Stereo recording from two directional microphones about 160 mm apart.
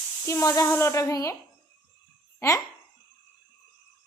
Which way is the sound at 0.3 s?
20° left (ahead or behind).